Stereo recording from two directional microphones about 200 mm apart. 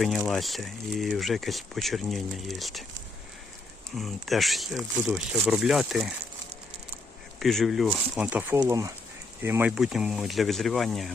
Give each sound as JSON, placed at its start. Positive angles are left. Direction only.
{"t": 0.0, "sound": "speech", "side_deg": 0}
{"t": 3.9, "sound": "speech", "side_deg": 0}
{"t": 7.3, "sound": "speech", "side_deg": 0}